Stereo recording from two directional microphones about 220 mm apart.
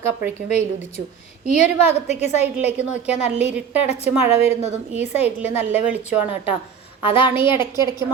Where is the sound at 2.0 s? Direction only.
30° left (ahead or behind).